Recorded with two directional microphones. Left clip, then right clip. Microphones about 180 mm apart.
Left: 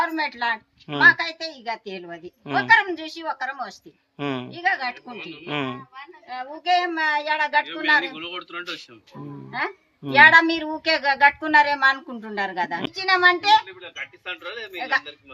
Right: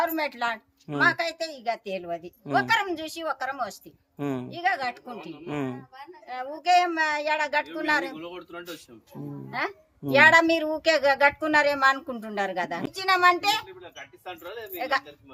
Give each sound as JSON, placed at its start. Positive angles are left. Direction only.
{"t": 0.0, "sound": "a woman's voice", "side_deg": -40}
{"t": 4.2, "sound": "speech", "side_deg": -5}
{"t": 4.5, "sound": "a woman's voice", "side_deg": -40}
{"t": 5.5, "sound": "speech", "side_deg": -10}
{"t": 6.2, "sound": "a woman's voice", "side_deg": -35}
{"t": 14.3, "sound": "a woman's voice", "side_deg": -25}